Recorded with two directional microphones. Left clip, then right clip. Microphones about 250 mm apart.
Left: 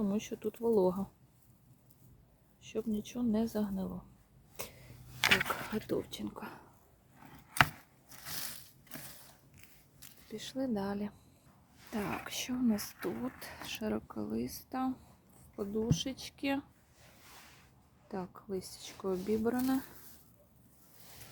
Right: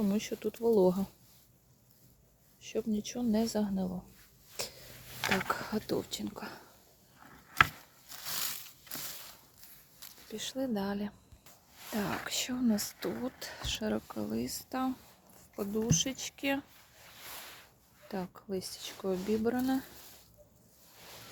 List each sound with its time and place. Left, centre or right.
0.0 s speech: centre
2.6 s speech: centre
4.6 s a sound: centre
5.2 s speech: left
5.5 s speech: centre
10.2 s speech: centre
18.1 s speech: centre